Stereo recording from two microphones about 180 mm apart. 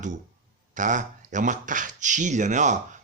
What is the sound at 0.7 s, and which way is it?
Speech, 45° right (ahead or behind).